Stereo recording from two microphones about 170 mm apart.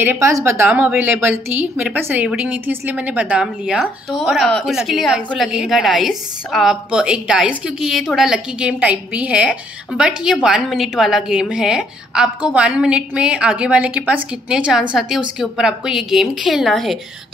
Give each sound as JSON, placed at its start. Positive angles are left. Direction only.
{"t": 0.0, "sound": "a woman's voice", "side_deg": -15}